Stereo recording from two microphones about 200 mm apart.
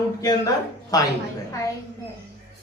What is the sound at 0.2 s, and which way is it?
Speech, 15° left (ahead or behind).